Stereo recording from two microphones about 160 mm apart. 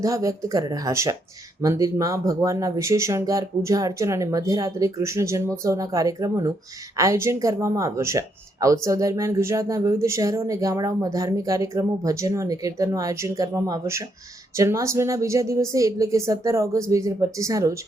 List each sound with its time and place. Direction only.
0.0 s speech: 20° right (ahead or behind)